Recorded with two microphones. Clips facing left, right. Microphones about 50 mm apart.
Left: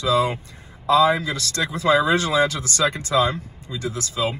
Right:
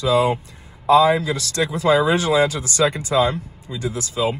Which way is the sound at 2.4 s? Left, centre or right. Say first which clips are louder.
Right 2 dB; left.